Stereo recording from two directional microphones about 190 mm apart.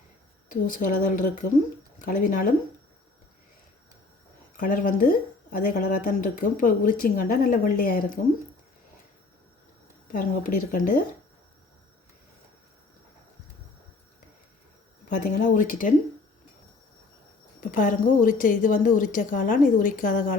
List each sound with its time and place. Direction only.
0.4 s a woman's voice: 45° left (ahead or behind)
4.5 s a woman's voice: 45° left (ahead or behind)
10.1 s a woman's voice: 45° left (ahead or behind)
15.1 s a woman's voice: 45° left (ahead or behind)
17.6 s a woman's voice: 45° left (ahead or behind)